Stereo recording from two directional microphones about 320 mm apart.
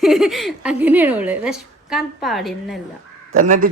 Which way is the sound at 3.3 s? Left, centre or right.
Right.